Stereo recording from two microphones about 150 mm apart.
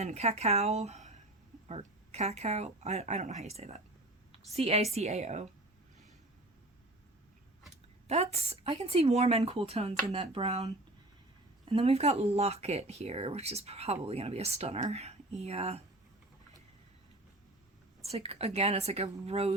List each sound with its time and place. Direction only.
0.0 s a woman's voice: 45° right (ahead or behind)
8.0 s speech: 45° right (ahead or behind)
18.0 s speech: 45° right (ahead or behind)